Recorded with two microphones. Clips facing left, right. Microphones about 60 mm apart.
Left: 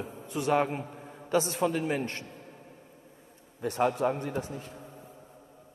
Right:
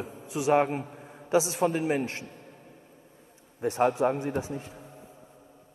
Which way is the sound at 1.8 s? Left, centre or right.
Centre.